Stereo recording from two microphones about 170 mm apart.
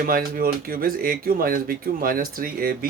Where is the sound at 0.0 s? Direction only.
60° right (ahead or behind).